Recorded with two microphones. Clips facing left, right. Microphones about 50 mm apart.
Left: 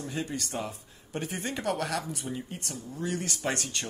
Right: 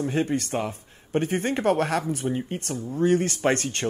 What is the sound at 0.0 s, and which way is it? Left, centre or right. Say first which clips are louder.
Speech: right 9 dB; right.